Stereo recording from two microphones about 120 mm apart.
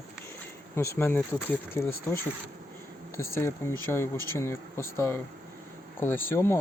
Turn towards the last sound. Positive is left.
turn(degrees=20)  # may be behind; listen again after turning